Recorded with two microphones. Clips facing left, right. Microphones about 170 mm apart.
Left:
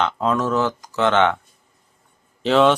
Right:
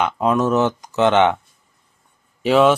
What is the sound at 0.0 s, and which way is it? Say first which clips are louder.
Speech: right 3 dB; 15° right (ahead or behind).